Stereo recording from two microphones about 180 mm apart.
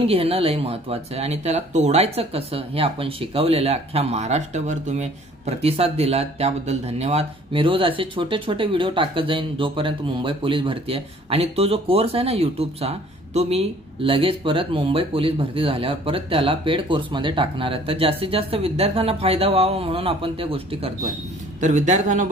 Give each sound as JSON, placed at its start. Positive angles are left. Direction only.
{"t": 0.0, "sound": "speech", "side_deg": -35}